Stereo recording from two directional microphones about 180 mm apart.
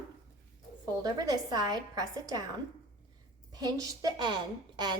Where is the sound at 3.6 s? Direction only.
20° right (ahead or behind).